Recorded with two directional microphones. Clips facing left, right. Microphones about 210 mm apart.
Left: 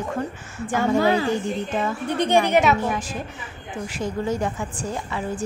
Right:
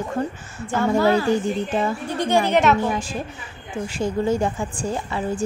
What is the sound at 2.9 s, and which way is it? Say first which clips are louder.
A woman's voice: right 2 dB; 30° right (ahead or behind).